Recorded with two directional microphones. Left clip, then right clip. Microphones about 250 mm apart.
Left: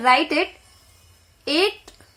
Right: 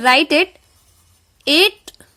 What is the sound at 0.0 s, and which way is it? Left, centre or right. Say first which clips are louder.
Speech: right 4 dB; right.